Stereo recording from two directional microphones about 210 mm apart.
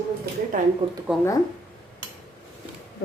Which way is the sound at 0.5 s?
40° right (ahead or behind).